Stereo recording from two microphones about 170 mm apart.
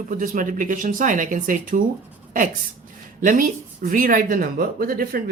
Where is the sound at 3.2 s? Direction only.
50° right (ahead or behind).